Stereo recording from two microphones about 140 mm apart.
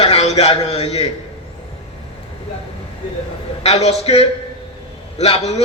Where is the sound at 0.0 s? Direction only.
45° left (ahead or behind).